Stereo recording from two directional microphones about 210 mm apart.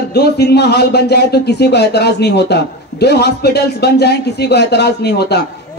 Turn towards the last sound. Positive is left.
turn(degrees=50)  # may be behind; listen again after turning